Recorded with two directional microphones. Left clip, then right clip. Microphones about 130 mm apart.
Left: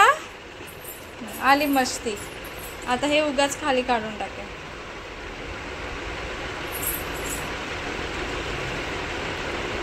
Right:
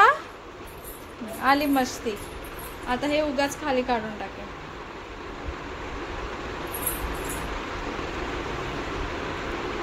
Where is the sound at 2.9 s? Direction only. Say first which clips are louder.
Left 3 dB; 5° left (ahead or behind).